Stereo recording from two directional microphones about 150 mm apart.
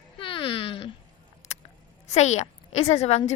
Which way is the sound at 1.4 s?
45° left (ahead or behind).